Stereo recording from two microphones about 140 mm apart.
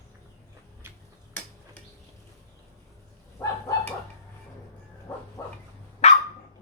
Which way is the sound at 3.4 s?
20° left (ahead or behind).